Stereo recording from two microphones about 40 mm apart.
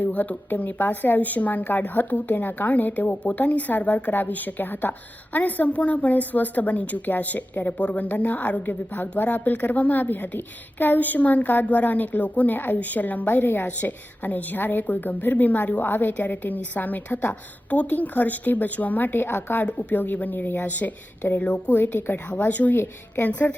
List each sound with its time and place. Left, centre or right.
0.1 s speech: left
0.5 s a woman's voice: left
2.3 s a woman's voice: left
7.7 s a woman's voice: left
13.7 s a woman's voice: left
14.8 s a woman's voice: left
19.2 s a woman's voice: left
19.9 s a woman's voice: left
20.7 s a woman's voice: left
21.9 s speech: left
22.4 s a woman's voice: left
22.8 s a woman's voice: left
23.3 s a woman's voice: left